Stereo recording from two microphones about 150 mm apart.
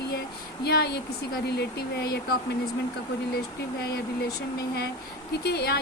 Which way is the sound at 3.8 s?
90° left.